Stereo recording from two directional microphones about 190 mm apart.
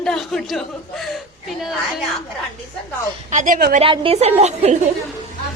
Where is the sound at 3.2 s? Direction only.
40° right (ahead or behind).